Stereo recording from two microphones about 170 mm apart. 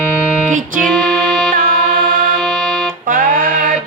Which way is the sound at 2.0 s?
55° right (ahead or behind).